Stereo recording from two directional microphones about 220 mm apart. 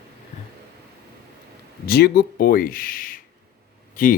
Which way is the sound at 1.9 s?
45° left (ahead or behind).